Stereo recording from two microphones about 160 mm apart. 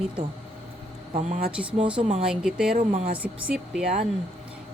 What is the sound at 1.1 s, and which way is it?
Speech, 45° right (ahead or behind).